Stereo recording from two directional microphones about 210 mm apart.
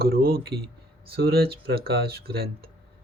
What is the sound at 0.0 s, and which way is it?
Speech, 45° right (ahead or behind).